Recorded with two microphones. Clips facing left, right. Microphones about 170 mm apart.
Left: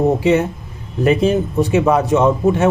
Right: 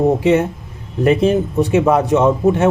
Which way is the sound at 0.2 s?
55° right (ahead or behind).